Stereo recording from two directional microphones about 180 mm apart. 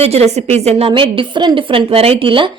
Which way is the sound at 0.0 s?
35° right (ahead or behind).